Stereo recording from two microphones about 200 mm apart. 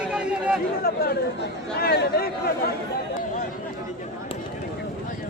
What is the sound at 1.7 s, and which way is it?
Speech, 50° left (ahead or behind).